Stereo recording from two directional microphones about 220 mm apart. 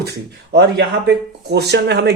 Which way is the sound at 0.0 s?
50° right (ahead or behind).